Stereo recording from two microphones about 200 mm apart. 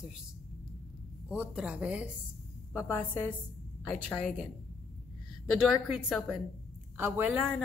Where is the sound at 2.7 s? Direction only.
10° left (ahead or behind).